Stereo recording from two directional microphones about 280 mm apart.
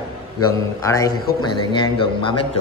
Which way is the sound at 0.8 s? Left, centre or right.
Centre.